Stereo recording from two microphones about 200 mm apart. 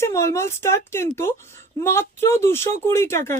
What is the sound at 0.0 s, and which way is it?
Speech, 15° left (ahead or behind).